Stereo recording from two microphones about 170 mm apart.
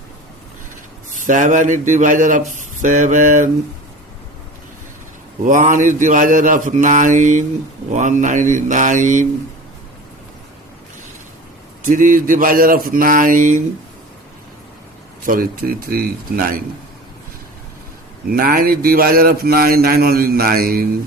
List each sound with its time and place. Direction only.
1.1 s speech: 50° right (ahead or behind)
5.5 s speech: 50° right (ahead or behind)
11.9 s speech: 50° right (ahead or behind)
15.2 s a man's voice: 55° right (ahead or behind)
18.3 s a man's voice: 60° right (ahead or behind)